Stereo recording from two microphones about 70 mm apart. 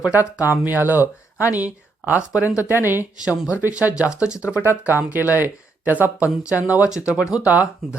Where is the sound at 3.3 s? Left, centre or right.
Left.